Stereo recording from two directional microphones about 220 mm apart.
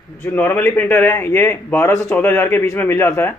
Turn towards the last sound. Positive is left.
turn(degrees=10)  # may be behind; listen again after turning